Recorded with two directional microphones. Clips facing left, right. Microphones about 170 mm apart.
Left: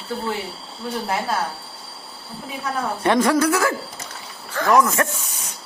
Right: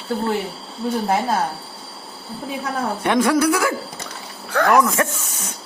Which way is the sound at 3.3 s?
10° right (ahead or behind).